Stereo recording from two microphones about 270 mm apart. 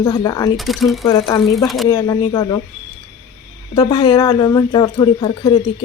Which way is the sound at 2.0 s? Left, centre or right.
Centre.